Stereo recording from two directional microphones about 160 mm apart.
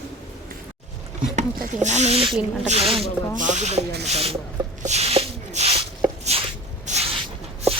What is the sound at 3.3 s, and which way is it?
Speech, 50° right (ahead or behind).